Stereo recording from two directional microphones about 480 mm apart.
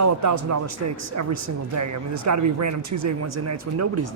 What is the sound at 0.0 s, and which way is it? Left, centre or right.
Speech, right.